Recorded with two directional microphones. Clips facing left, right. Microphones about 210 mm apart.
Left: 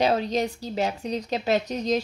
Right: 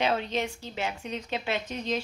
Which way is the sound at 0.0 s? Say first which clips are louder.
Left 5 dB; 40° left (ahead or behind).